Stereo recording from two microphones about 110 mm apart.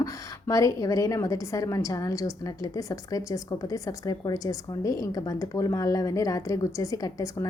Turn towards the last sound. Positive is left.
turn(degrees=30)  # may be behind; listen again after turning